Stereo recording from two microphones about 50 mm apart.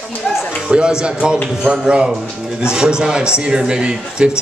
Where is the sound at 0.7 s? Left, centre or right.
Centre.